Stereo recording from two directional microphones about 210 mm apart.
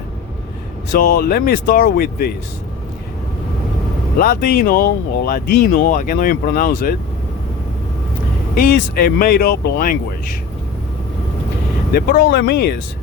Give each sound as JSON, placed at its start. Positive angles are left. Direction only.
{"t": 0.9, "sound": "speech", "side_deg": 45}
{"t": 4.2, "sound": "speech", "side_deg": 45}
{"t": 8.5, "sound": "speech", "side_deg": 45}
{"t": 11.9, "sound": "speech", "side_deg": 45}